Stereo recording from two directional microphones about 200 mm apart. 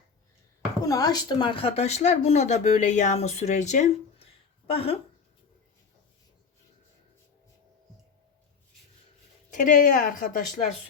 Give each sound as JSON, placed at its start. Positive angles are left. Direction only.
{"t": 0.9, "sound": "speech", "side_deg": 20}
{"t": 9.5, "sound": "speech", "side_deg": 40}